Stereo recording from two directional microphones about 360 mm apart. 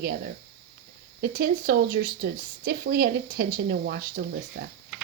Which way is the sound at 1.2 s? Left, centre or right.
Right.